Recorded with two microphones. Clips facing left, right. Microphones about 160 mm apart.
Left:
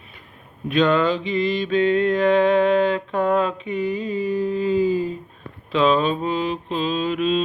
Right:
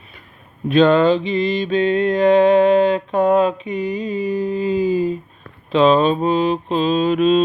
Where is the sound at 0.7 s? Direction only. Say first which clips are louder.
Right 5 dB; 30° right (ahead or behind); by 5.1 s 15° right (ahead or behind).